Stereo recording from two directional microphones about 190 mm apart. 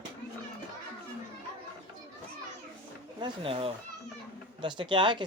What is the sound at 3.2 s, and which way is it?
Speech, 30° right (ahead or behind).